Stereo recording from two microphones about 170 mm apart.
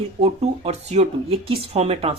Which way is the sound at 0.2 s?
35° right (ahead or behind).